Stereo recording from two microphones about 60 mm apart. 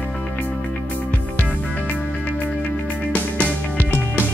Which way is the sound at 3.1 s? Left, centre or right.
Left.